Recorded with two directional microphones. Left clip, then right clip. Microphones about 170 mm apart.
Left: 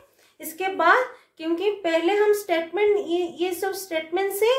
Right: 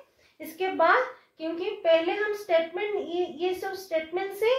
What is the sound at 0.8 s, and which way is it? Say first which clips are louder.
A woman's voice: left 3 dB; 60° left (ahead or behind).